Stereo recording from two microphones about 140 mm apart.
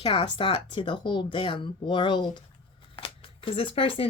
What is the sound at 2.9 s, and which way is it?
Shuffling cards, 40° left (ahead or behind).